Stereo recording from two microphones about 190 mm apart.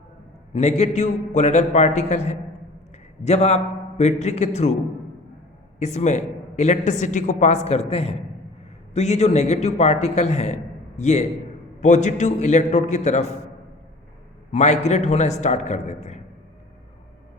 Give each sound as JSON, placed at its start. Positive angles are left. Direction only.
{"t": 0.5, "sound": "a man's voice", "side_deg": 35}
{"t": 5.8, "sound": "a man's voice", "side_deg": 35}
{"t": 14.5, "sound": "a man's voice", "side_deg": 35}